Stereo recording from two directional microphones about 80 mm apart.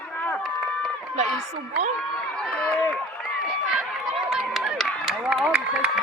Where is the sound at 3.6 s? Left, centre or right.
Centre.